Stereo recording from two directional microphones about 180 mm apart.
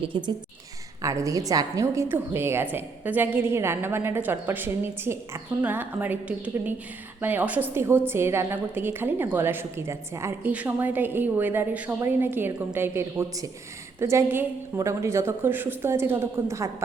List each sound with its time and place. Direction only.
0.0 s a woman's voice: 25° right (ahead or behind)